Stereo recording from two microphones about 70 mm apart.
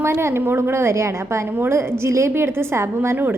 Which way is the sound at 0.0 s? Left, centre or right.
Right.